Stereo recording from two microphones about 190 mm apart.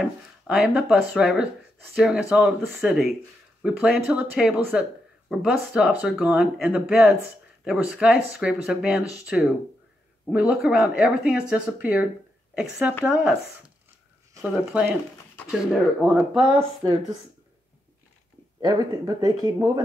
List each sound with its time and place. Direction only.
0.0 s speech: 5° right (ahead or behind)
18.6 s speech: 20° right (ahead or behind)